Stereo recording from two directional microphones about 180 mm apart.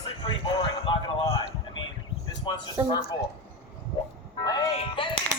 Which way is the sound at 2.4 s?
25° left (ahead or behind).